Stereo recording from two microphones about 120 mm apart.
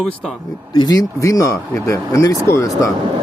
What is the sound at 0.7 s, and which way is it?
Speech, 35° left (ahead or behind).